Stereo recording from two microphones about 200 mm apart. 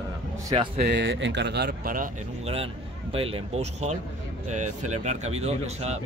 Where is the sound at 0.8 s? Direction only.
65° right (ahead or behind); by 2.1 s 45° right (ahead or behind).